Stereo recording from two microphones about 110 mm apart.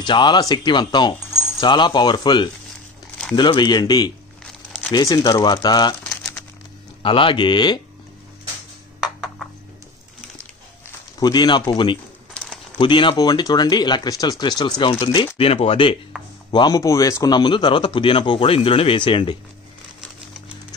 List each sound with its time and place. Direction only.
0.0 s speech: 45° left (ahead or behind)
7.0 s speech: 50° left (ahead or behind)
9.0 s a sound: 5° right (ahead or behind)
11.1 s speech: 40° left (ahead or behind)
12.4 s a sound: 10° left (ahead or behind)
12.7 s speech: 50° left (ahead or behind)
15.1 s speech: 55° left (ahead or behind)
16.4 s speech: 40° left (ahead or behind)
17.4 s speech: 45° left (ahead or behind)